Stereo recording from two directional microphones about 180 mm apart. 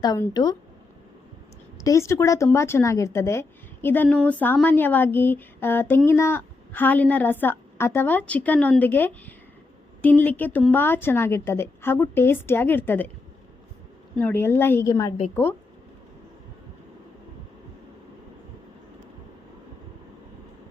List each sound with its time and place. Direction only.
0.0 s speech: 20° left (ahead or behind)
1.8 s speech: 15° left (ahead or behind)
14.2 s speech: 10° left (ahead or behind)